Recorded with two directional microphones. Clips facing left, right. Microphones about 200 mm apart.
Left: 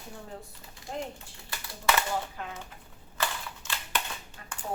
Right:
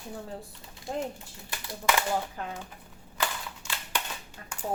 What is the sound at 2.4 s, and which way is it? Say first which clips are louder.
Typewriter: right 3 dB; 40° right (ahead or behind).